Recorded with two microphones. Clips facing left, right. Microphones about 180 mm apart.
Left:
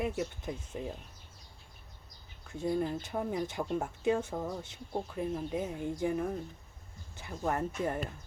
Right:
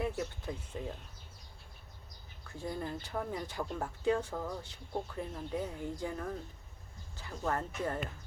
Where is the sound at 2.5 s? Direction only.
20° left (ahead or behind).